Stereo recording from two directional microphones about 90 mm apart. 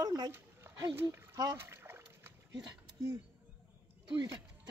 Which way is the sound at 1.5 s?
25° right (ahead or behind).